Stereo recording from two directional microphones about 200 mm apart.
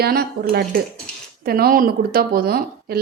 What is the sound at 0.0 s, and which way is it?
A woman's voice, 50° right (ahead or behind).